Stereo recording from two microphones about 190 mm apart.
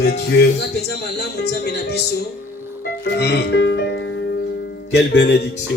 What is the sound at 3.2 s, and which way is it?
A man's voice, 60° left (ahead or behind).